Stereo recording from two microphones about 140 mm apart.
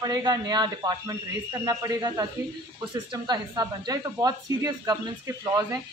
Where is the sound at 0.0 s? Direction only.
30° right (ahead or behind).